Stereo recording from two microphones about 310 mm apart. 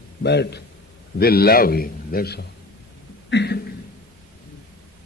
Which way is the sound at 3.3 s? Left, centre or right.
Left.